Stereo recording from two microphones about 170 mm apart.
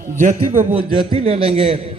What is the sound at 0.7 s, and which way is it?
A man's voice, 35° right (ahead or behind).